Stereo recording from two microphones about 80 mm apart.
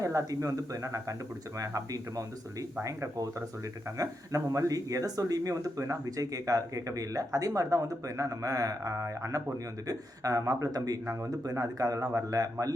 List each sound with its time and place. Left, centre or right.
0.0 s speech: right
11.0 s speech: right
11.3 s speech: right